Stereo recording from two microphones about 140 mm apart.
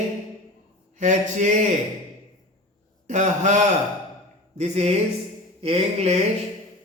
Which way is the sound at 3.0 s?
60° right (ahead or behind).